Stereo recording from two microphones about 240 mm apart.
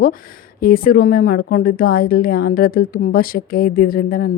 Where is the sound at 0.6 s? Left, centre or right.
Left.